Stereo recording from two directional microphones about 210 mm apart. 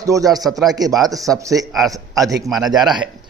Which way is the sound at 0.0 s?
15° right (ahead or behind).